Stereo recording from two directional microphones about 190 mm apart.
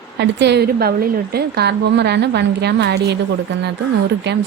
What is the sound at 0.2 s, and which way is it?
A woman's voice, 65° right (ahead or behind).